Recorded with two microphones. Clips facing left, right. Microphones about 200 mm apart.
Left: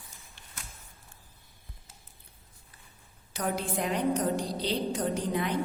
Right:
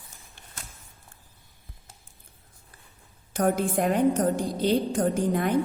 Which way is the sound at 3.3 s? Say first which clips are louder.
Right 7 dB; 50° right (ahead or behind).